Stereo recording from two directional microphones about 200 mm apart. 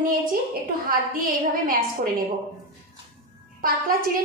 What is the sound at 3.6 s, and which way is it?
Speech, 45° right (ahead or behind).